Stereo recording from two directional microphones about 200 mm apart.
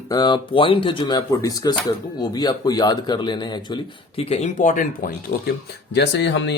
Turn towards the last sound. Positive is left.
turn(degrees=65)  # may be behind; listen again after turning